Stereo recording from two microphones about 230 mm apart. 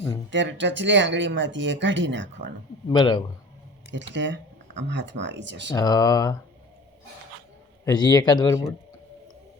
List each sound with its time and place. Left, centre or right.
0.3 s speech: right
2.9 s speech: centre
3.9 s speech: right
5.7 s speech: centre
7.9 s speech: centre